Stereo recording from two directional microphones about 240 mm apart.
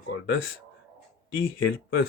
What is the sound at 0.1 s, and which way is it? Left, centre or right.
Speech, left.